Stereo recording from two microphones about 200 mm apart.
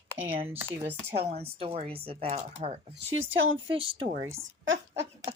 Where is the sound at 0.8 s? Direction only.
10° right (ahead or behind).